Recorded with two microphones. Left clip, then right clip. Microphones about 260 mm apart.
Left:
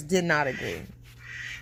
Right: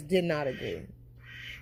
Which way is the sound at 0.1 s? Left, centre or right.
Centre.